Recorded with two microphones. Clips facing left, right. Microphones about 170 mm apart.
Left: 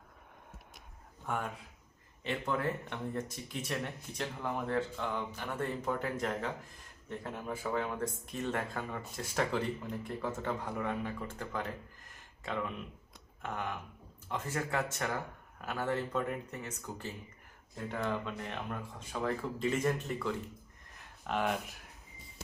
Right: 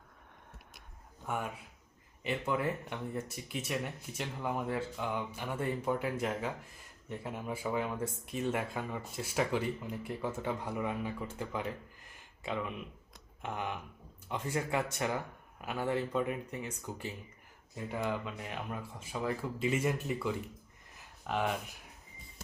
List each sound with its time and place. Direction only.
2.2 s speech: 10° right (ahead or behind)
13.4 s speech: 15° right (ahead or behind)